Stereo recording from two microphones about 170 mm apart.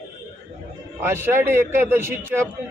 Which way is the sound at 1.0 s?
15° right (ahead or behind).